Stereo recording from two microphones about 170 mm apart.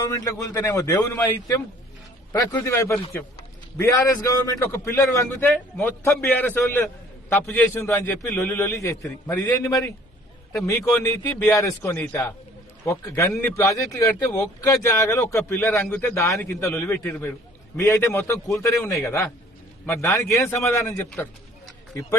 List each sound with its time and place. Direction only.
0.0 s a man's voice: 20° left (ahead or behind)
2.3 s a man's voice: 20° left (ahead or behind)